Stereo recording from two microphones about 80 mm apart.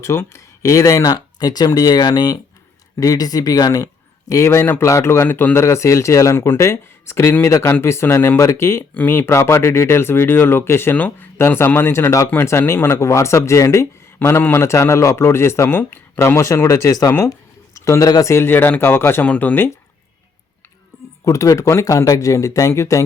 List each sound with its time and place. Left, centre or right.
0.0 s speech: left
4.3 s a man's voice: left
14.2 s a man's voice: left
19.2 s speech: centre
20.9 s a sound: left
21.2 s speech: left